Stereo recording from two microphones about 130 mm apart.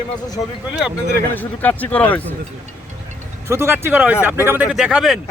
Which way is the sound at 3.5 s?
20° right (ahead or behind).